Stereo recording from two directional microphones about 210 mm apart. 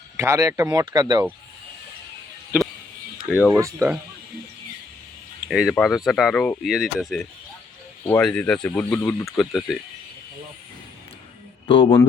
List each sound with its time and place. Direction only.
0.2 s speech: 15° right (ahead or behind)
2.5 s a sound: 5° right (ahead or behind)
3.2 s speech: 5° right (ahead or behind)
5.5 s speech: 5° right (ahead or behind)
11.7 s speech: 25° left (ahead or behind)